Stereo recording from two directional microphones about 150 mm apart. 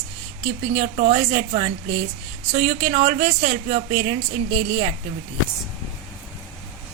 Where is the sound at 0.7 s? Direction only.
55° right (ahead or behind).